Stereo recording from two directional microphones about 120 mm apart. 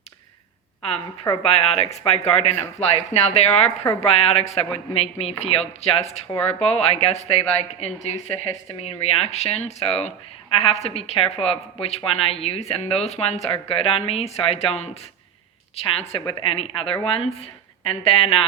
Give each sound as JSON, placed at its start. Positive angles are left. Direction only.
{"t": 1.4, "sound": "a woman's voice", "side_deg": 60}